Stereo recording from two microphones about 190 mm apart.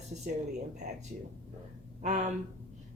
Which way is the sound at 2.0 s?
40° right (ahead or behind).